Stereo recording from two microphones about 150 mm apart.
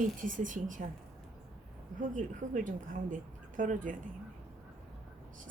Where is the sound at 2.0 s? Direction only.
60° right (ahead or behind).